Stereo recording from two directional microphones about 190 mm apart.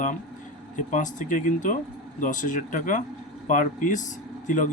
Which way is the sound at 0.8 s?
40° left (ahead or behind).